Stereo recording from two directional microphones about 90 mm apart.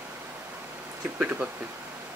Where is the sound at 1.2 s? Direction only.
20° right (ahead or behind).